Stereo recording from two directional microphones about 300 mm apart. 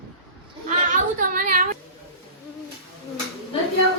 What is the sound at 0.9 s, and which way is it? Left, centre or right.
Speech, right.